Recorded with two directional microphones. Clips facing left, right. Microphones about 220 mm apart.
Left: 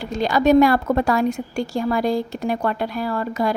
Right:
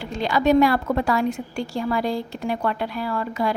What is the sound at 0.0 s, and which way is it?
A woman's voice, 40° left (ahead or behind).